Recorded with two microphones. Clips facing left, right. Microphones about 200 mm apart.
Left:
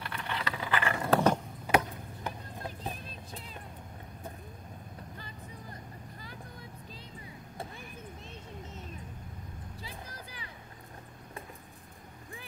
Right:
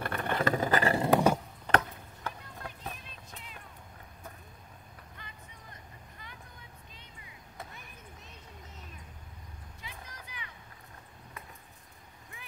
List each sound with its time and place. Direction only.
0.0 s vehicle: 50° right (ahead or behind)
1.1 s a sound: 10° right (ahead or behind)
1.7 s chop: 10° left (ahead or behind)
2.6 s music: 30° left (ahead or behind)
5.1 s vehicle: 35° left (ahead or behind)
9.8 s music: 35° left (ahead or behind)